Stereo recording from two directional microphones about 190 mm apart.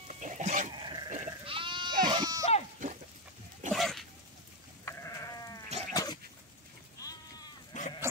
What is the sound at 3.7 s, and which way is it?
Dog, centre (ahead or behind).